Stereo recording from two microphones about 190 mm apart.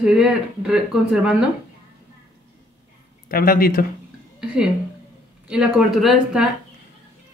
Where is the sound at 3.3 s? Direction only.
50° left (ahead or behind).